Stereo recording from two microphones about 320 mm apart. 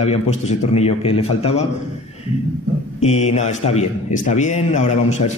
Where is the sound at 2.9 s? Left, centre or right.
Left.